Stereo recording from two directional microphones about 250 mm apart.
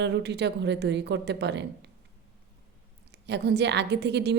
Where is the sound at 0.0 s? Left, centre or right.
Right.